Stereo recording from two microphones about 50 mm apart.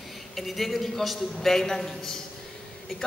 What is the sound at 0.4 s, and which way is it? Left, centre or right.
A man's voice, centre.